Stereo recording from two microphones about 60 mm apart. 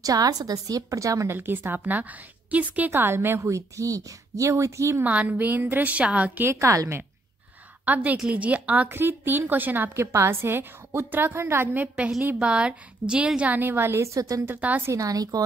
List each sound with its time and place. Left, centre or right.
0.0 s a woman's voice: right
1.3 s a woman's voice: right
3.4 s speech: right
5.0 s a woman's voice: right
6.5 s a woman's voice: right
7.8 s a woman's voice: right
8.9 s a woman's voice: right
9.9 s a woman's voice: right
12.4 s a woman's voice: centre
13.6 s a woman's voice: right
14.0 s speech: right
14.4 s a woman's voice: right
14.9 s a woman's voice: right